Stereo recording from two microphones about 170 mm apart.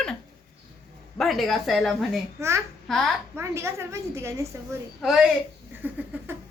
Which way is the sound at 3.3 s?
15° right (ahead or behind).